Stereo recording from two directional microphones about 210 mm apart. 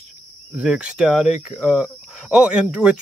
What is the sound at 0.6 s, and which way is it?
Speech, 5° right (ahead or behind).